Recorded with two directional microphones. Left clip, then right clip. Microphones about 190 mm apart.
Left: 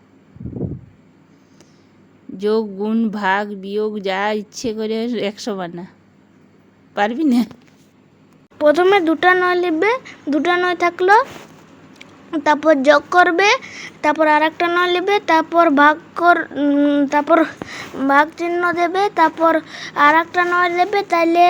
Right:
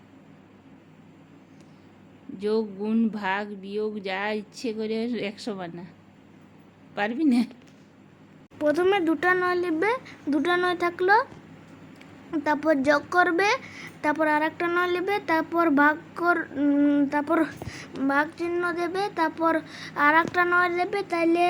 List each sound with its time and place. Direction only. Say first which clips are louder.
2.4 s speech: left 8 dB; 40° left (ahead or behind)
6.9 s speech: left 7 dB; 40° left (ahead or behind)
8.5 s a woman's voice: left 10 dB; 15° left (ahead or behind)
12.3 s a woman's voice: left 9 dB; 10° left (ahead or behind)